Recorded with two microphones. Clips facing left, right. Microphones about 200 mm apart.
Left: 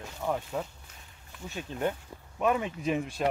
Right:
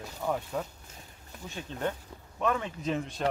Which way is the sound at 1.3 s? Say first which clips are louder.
Left 1 dB; 45° right (ahead or behind).